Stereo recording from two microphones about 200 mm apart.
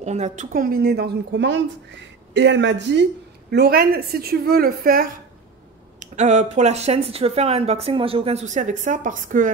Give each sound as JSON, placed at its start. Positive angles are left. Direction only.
{"t": 0.0, "sound": "a woman's voice", "side_deg": -35}
{"t": 3.5, "sound": "a woman's voice", "side_deg": -50}
{"t": 5.9, "sound": "speech", "side_deg": -35}